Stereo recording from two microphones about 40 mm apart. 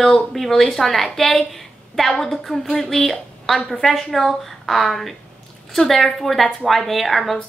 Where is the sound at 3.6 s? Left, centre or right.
Left.